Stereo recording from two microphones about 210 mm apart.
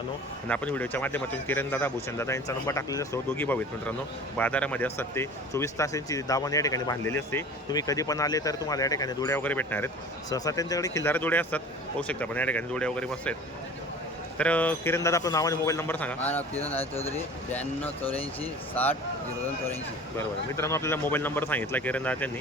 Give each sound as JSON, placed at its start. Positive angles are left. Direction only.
{"t": 0.4, "sound": "speech", "side_deg": 5}
{"t": 14.3, "sound": "speech", "side_deg": 5}
{"t": 16.9, "sound": "speech", "side_deg": 30}
{"t": 17.5, "sound": "speech", "side_deg": 5}
{"t": 20.1, "sound": "speech", "side_deg": 15}